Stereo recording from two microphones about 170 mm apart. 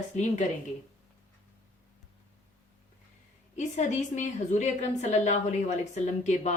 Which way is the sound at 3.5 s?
45° left (ahead or behind).